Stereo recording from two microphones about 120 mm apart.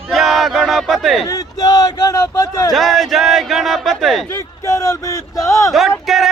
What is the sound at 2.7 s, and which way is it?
Speech, centre (ahead or behind).